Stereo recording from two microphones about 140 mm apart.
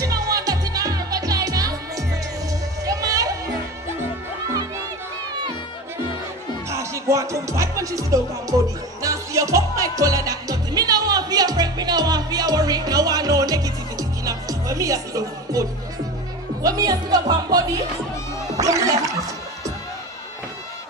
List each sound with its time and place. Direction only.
0.0 s music: 25° right (ahead or behind)
6.7 s music: 20° right (ahead or behind)
16.6 s speech: 25° right (ahead or behind)
18.6 s gargling: 25° right (ahead or behind)